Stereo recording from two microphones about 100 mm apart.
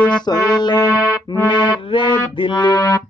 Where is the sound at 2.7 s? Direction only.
30° left (ahead or behind).